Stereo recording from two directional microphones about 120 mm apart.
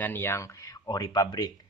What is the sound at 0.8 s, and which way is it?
Speech, 30° left (ahead or behind).